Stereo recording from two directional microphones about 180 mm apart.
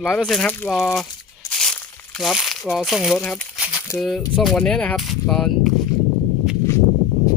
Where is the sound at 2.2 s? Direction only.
Centre (ahead or behind).